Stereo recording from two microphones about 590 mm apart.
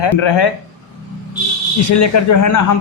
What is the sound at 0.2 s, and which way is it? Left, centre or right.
Speech, left.